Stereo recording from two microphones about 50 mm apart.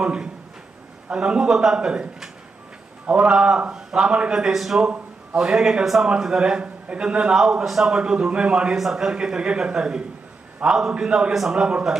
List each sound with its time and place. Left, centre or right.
0.0 s a man's voice: centre
3.2 s a man's voice: centre
7.3 s a man's voice: centre
8.7 s a man's voice: centre